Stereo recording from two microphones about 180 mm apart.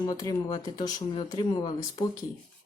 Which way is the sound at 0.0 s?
20° left (ahead or behind).